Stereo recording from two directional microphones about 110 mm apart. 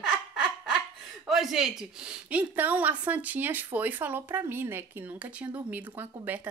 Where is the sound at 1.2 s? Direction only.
Centre (ahead or behind).